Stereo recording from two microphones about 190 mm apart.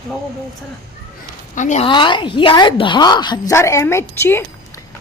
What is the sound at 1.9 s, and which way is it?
A woman's voice, 25° left (ahead or behind).